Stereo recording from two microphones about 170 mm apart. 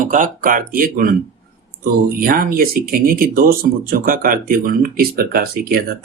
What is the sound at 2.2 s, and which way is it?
Speech, 60° right (ahead or behind).